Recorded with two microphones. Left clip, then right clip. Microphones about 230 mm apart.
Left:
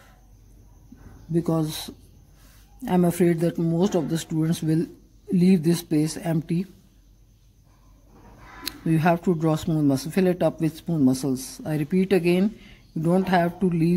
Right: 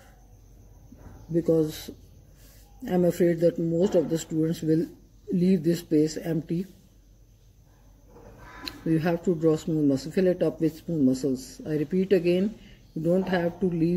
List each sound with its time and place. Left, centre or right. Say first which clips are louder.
1.3 s speech: right 2 dB; left
8.6 s speech: left 4 dB; left